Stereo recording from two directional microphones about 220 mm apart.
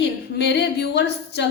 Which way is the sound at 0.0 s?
50° left (ahead or behind).